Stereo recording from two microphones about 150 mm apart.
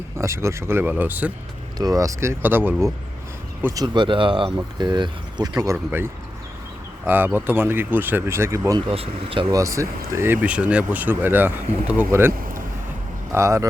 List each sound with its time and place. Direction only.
0.2 s speech: 20° right (ahead or behind)
1.8 s speech: 25° right (ahead or behind)
3.8 s speech: 30° right (ahead or behind)
8.9 s speech: 40° right (ahead or behind)
9.5 s speech: 20° right (ahead or behind)